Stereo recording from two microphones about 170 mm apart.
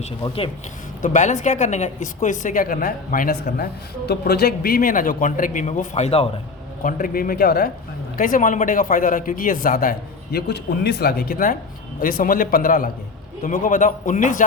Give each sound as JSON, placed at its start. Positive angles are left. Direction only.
{"t": 1.0, "sound": "a woman's voice", "side_deg": 45}
{"t": 6.8, "sound": "a woman's voice", "side_deg": 55}
{"t": 10.3, "sound": "a woman's voice", "side_deg": 70}